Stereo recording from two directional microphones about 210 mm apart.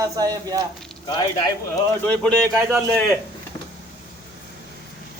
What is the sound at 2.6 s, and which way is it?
Speech, 15° right (ahead or behind).